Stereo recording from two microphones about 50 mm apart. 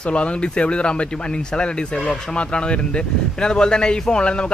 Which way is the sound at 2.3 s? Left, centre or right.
Left.